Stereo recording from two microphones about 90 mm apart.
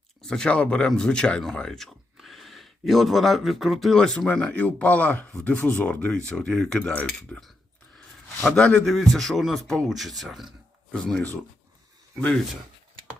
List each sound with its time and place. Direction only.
0.2 s speech: 5° left (ahead or behind)
8.4 s speech: 10° left (ahead or behind)
10.9 s speech: 10° left (ahead or behind)